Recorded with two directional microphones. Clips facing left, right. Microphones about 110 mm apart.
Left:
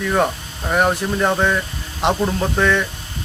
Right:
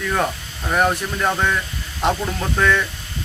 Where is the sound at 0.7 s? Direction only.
15° left (ahead or behind).